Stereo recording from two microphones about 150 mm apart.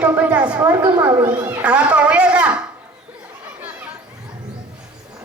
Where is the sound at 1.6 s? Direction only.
10° right (ahead or behind).